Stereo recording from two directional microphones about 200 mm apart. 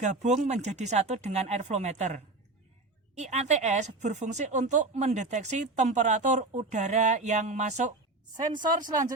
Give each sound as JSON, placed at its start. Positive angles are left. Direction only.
{"t": 0.0, "sound": "speech", "side_deg": -35}
{"t": 8.8, "sound": "speech", "side_deg": -20}